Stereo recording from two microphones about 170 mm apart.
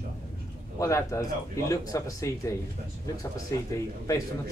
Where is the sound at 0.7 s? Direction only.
20° left (ahead or behind).